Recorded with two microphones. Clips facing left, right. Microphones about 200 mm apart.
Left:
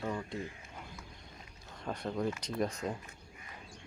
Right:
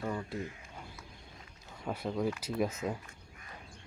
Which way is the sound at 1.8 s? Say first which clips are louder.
Right 1 dB; 5° right (ahead or behind).